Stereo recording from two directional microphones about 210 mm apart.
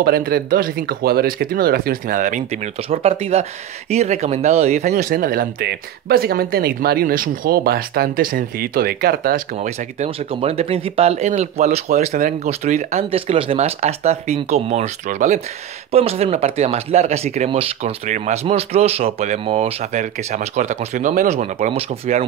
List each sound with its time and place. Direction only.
0.0 s speech: 45° right (ahead or behind); by 22.2 s 30° right (ahead or behind)